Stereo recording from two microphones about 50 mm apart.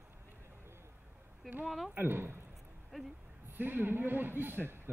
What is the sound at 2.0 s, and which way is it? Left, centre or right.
Speech, right.